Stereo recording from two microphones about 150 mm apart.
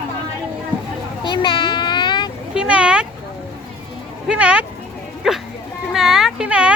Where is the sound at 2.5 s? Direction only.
5° right (ahead or behind).